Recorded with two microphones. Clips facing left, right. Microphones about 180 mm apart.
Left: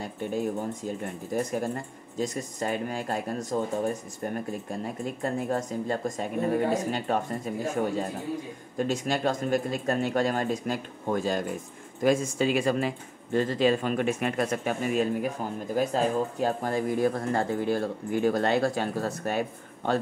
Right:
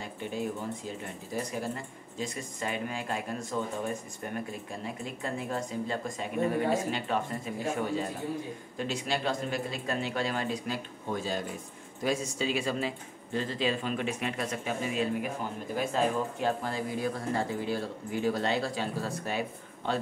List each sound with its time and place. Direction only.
0.8 s speech: 50° left (ahead or behind)
15.7 s speech: 40° left (ahead or behind)